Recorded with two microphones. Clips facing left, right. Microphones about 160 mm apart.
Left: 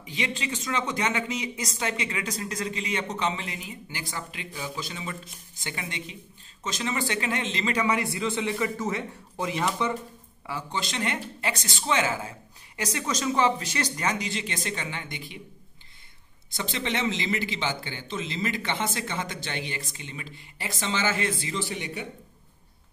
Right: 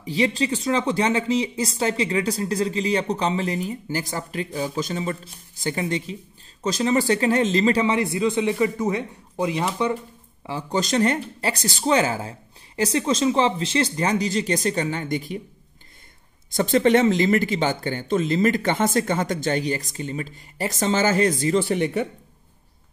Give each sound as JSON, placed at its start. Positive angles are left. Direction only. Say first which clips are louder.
{"t": 0.0, "sound": "speech", "louder": "right 10 dB", "side_deg": -35}
{"t": 10.7, "sound": "speech", "louder": "right 11 dB", "side_deg": -40}
{"t": 16.5, "sound": "speech", "louder": "right 13 dB", "side_deg": -50}